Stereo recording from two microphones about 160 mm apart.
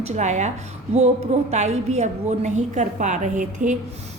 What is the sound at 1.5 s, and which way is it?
A woman's voice, 45° right (ahead or behind).